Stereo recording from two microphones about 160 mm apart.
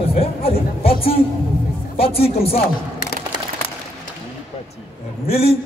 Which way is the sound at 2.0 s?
35° left (ahead or behind).